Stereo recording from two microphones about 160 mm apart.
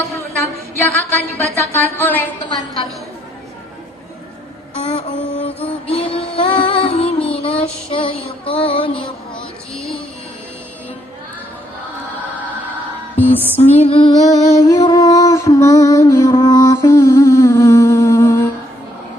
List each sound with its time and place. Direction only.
0.8 s a sound: 10° left (ahead or behind)
4.9 s music: 35° left (ahead or behind)
7.9 s child singing: 35° left (ahead or behind)
13.1 s music: 10° left (ahead or behind)
13.7 s music: 35° left (ahead or behind); by 18.4 s 15° left (ahead or behind)